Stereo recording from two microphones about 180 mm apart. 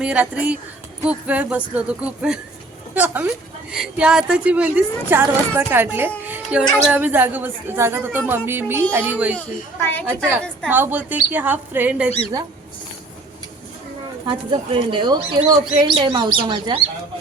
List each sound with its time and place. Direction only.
0.0 s a woman's voice: 5° right (ahead or behind)
6.2 s music: 10° right (ahead or behind)
6.7 s a woman's voice: 5° right (ahead or behind)
9.8 s a woman's voice: 10° left (ahead or behind)
10.7 s a woman's voice: 10° right (ahead or behind)
14.3 s speech: 25° right (ahead or behind)